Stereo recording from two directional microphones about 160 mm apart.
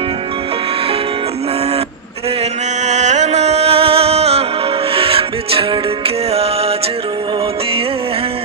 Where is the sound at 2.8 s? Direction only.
45° right (ahead or behind).